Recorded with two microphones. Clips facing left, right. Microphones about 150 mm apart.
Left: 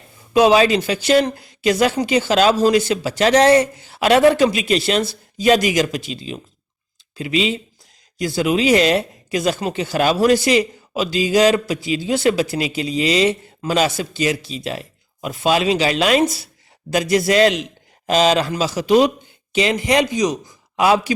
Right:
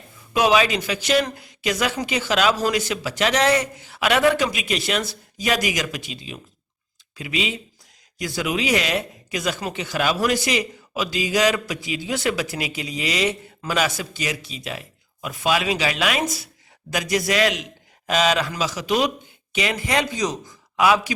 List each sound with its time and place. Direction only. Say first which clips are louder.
0.3 s speech: left 6 dB; 30° left (ahead or behind); by 20.5 s 15° left (ahead or behind)
20.7 s speech: left 3 dB; 30° left (ahead or behind)